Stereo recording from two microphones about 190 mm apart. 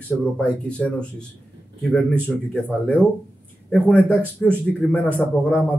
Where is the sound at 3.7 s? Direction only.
5° left (ahead or behind).